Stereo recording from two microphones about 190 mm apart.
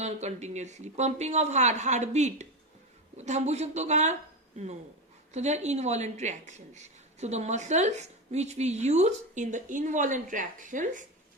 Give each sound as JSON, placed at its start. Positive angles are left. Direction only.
{"t": 0.0, "sound": "a woman's voice", "side_deg": -35}